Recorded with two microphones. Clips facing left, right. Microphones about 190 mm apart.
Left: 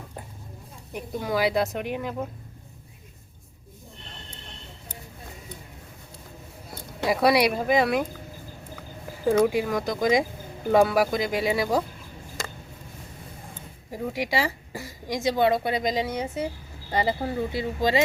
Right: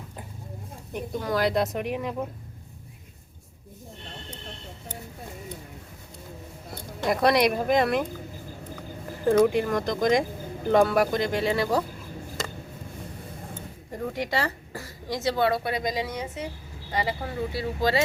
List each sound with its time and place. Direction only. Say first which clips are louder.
0.9 s speech: even; 10° left (ahead or behind)
7.1 s speech: left 1 dB; 5° left (ahead or behind)
9.2 s a woman's voice: right 1 dB; 5° left (ahead or behind)
13.9 s a woman's voice: left 1 dB; 10° left (ahead or behind)